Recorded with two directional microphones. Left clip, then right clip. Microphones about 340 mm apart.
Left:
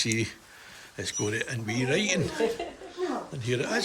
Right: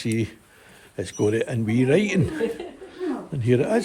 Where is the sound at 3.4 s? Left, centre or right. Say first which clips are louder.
Right 9 dB; centre.